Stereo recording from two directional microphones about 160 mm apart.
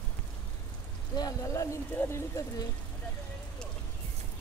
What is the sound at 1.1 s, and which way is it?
Speech, 20° left (ahead or behind).